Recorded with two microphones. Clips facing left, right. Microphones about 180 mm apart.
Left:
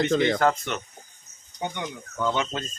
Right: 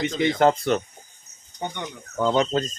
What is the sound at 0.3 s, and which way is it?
Speech, 30° right (ahead or behind).